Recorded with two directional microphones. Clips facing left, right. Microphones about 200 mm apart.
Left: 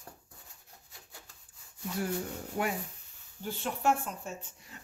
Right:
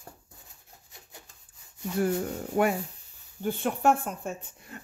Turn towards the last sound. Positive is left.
turn(degrees=-55)  # may be behind; listen again after turning